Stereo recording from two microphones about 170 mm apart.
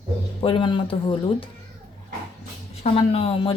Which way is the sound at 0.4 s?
30° left (ahead or behind).